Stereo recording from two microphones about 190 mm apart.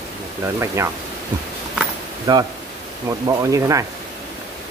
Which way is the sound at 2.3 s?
20° right (ahead or behind).